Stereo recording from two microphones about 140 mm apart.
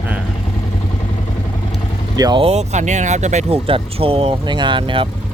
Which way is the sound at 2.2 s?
30° right (ahead or behind).